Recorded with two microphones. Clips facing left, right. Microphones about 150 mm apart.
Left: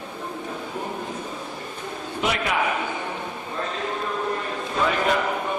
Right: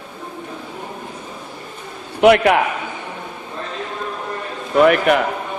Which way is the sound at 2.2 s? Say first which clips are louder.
Right 14 dB; 65° right (ahead or behind).